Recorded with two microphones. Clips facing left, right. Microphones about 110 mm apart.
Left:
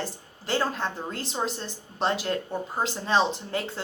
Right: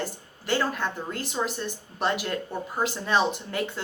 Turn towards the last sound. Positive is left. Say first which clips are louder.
# right 1 dB
turn(degrees=30)  # may be behind; listen again after turning